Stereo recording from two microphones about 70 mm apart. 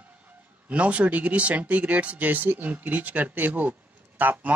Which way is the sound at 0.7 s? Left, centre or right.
Centre.